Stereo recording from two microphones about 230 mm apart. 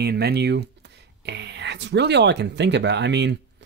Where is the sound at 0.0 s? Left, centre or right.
Right.